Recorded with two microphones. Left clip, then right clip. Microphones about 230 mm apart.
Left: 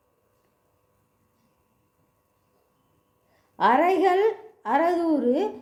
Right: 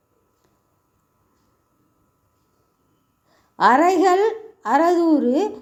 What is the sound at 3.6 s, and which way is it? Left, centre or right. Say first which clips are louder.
A woman's voice: right 5 dB; right.